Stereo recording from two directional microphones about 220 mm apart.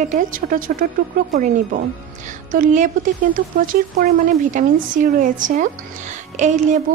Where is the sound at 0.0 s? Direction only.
35° right (ahead or behind).